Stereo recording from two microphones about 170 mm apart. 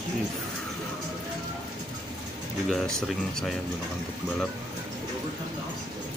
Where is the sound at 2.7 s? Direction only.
5° left (ahead or behind).